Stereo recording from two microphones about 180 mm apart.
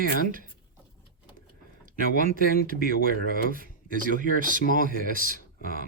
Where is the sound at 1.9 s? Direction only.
50° right (ahead or behind).